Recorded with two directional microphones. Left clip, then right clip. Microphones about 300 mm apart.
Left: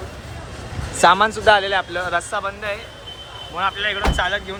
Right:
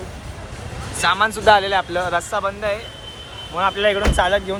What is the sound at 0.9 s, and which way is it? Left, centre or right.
Speech, centre.